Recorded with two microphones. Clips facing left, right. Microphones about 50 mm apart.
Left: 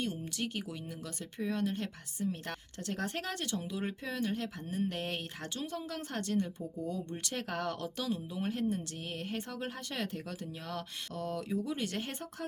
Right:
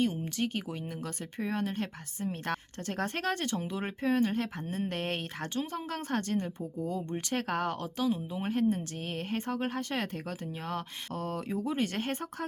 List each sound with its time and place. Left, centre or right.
0.0 s speech: right